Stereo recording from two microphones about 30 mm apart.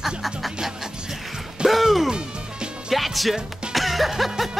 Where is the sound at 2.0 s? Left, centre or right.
Right.